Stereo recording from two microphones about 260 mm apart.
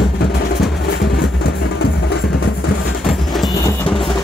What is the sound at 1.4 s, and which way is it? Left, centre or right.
Music, left.